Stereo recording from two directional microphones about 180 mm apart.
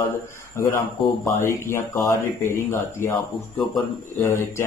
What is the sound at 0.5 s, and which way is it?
Speech, 15° left (ahead or behind).